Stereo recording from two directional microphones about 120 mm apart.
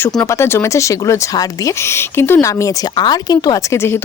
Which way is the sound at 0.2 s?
25° left (ahead or behind).